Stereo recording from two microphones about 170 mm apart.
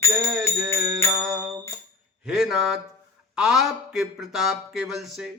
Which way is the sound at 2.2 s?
5° right (ahead or behind).